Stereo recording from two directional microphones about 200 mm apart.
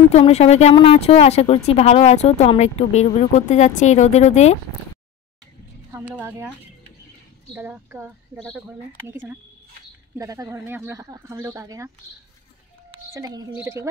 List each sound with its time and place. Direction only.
0.1 s speech: 30° left (ahead or behind)
6.1 s speech: 5° right (ahead or behind)
7.5 s speech: 10° right (ahead or behind)
13.1 s a woman's voice: 20° right (ahead or behind)